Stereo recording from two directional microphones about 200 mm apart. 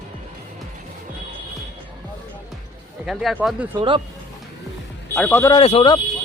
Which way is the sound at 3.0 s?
5° right (ahead or behind).